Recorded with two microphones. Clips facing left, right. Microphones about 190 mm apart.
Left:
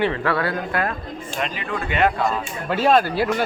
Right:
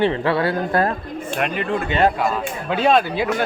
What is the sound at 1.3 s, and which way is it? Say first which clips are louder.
Speech: right 5 dB; 60° right (ahead or behind).